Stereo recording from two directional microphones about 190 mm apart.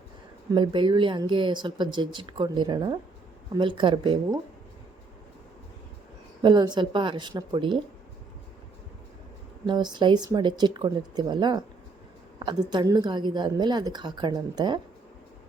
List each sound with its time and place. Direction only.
0.5 s speech: 25° right (ahead or behind)
6.4 s speech: 25° right (ahead or behind)
9.6 s speech: 25° right (ahead or behind)
12.7 s speech: 20° right (ahead or behind)